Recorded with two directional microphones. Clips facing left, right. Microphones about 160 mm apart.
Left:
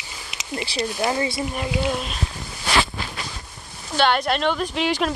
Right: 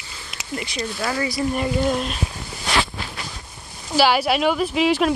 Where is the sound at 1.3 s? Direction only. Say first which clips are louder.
Right 4 dB; centre (ahead or behind).